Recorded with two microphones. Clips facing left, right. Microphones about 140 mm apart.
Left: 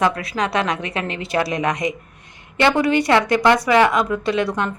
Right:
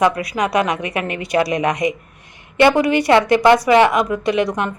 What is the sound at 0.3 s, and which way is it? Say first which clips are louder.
Speech: right 3 dB; 15° right (ahead or behind).